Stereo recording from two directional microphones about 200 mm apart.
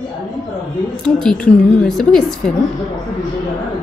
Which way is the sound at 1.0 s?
5° left (ahead or behind).